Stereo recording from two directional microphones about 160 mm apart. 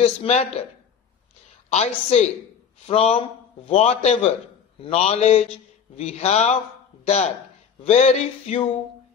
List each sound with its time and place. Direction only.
0.0 s a man's voice: 40° left (ahead or behind)
1.7 s a man's voice: 45° left (ahead or behind)